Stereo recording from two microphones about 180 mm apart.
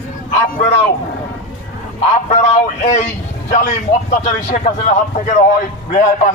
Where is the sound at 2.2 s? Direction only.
40° left (ahead or behind).